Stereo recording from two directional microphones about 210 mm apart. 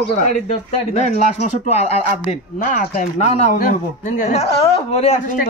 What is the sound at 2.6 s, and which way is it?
Speech, 45° left (ahead or behind).